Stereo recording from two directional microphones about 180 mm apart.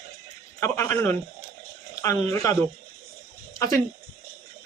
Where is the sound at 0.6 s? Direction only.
15° left (ahead or behind).